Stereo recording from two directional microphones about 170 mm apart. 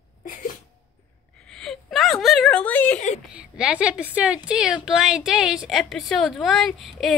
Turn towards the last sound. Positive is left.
turn(degrees=0)  # may be behind; listen again after turning